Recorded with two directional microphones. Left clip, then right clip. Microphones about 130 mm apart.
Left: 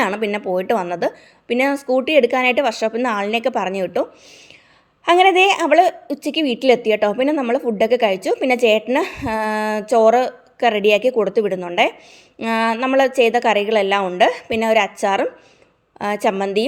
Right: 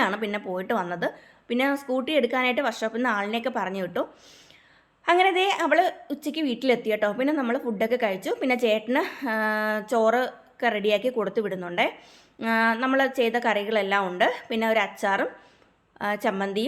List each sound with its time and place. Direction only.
0.1 s a woman's voice: 40° left (ahead or behind)
5.0 s a woman's voice: 45° left (ahead or behind)